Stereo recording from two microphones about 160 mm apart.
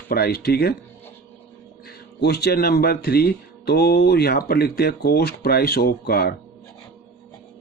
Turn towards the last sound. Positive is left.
turn(degrees=70)  # may be behind; listen again after turning